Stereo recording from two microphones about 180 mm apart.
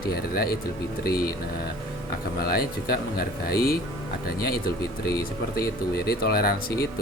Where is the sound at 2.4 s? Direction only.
60° left (ahead or behind).